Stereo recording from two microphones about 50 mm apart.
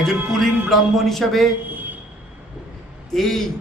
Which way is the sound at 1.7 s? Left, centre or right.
Right.